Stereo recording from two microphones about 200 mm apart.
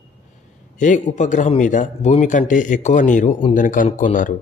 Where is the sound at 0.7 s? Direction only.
35° left (ahead or behind).